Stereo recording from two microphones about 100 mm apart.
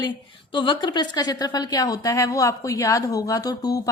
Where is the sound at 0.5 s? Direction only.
55° left (ahead or behind).